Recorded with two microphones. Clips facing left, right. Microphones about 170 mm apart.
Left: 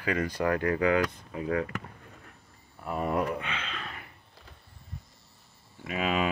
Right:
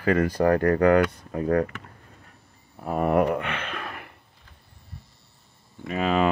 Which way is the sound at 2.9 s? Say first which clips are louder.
Right 7 dB; 60° right (ahead or behind).